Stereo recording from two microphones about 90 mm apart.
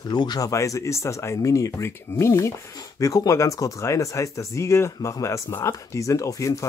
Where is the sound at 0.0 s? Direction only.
50° left (ahead or behind).